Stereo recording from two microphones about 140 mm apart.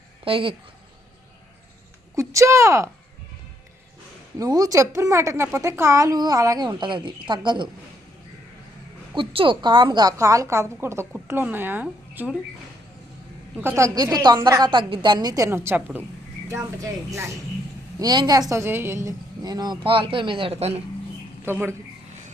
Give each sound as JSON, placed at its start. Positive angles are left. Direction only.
{"t": 0.3, "sound": "speech", "side_deg": -40}
{"t": 2.1, "sound": "speech", "side_deg": -20}
{"t": 4.4, "sound": "a woman's voice", "side_deg": -25}
{"t": 9.1, "sound": "a woman's voice", "side_deg": -40}
{"t": 13.6, "sound": "a woman's voice", "side_deg": -20}
{"t": 21.4, "sound": "speech", "side_deg": -15}